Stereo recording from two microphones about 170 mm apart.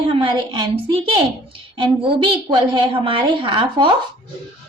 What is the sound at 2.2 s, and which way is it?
A child's voice, 30° right (ahead or behind).